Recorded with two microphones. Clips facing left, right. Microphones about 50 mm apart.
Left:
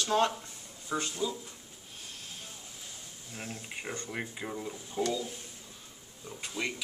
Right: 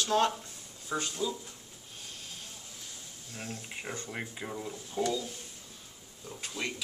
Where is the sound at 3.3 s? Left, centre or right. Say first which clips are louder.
Even; centre.